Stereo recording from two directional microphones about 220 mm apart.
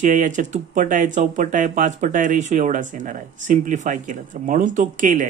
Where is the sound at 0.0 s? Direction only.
35° right (ahead or behind).